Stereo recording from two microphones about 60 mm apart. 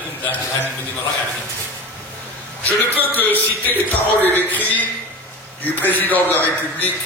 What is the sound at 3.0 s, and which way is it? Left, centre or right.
A man's voice, left.